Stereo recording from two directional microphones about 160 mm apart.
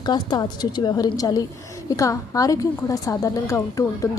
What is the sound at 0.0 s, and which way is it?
A woman's voice, 25° left (ahead or behind).